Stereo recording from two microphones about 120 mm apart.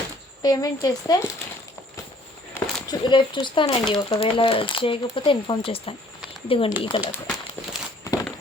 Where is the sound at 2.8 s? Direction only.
40° left (ahead or behind).